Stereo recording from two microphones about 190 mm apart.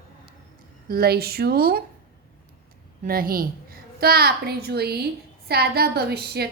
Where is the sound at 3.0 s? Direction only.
50° right (ahead or behind).